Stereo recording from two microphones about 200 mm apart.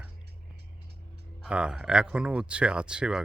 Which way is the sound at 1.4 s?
5° right (ahead or behind).